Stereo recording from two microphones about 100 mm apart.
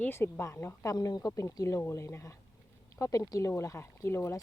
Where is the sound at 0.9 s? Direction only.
40° left (ahead or behind).